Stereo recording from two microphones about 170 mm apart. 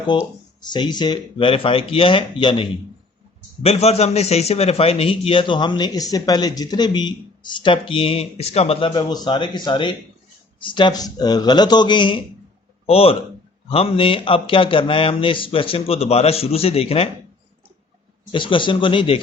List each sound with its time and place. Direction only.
0.1 s a man's voice: 25° left (ahead or behind)
18.3 s a man's voice: 30° left (ahead or behind)